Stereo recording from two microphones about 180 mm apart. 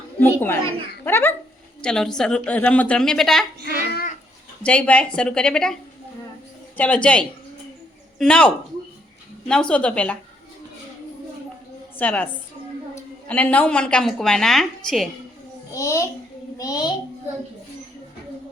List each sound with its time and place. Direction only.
0.2 s a child's voice: 10° left (ahead or behind)
3.8 s a sound: 60° left (ahead or behind)
4.6 s a woman's voice: 5° left (ahead or behind)
6.7 s a woman's voice: 5° left (ahead or behind)
11.9 s a woman's voice: 10° left (ahead or behind)
15.7 s a child's voice: 15° left (ahead or behind)